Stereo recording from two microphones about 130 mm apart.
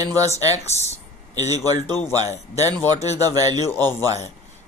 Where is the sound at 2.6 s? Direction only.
30° right (ahead or behind).